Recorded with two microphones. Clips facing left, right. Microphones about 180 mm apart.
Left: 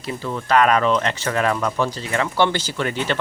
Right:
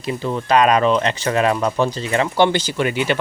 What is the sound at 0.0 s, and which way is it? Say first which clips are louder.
A man's voice: right 4 dB; 20° right (ahead or behind).